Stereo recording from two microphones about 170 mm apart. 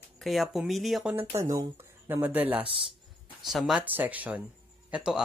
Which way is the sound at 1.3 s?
20° right (ahead or behind).